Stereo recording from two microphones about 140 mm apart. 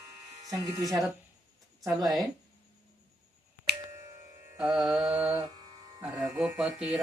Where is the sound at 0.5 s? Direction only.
30° right (ahead or behind).